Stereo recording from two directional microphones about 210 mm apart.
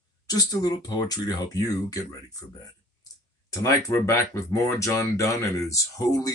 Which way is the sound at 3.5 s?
15° left (ahead or behind).